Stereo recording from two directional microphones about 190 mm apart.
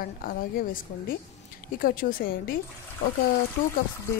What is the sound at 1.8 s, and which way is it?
Speech, 50° left (ahead or behind).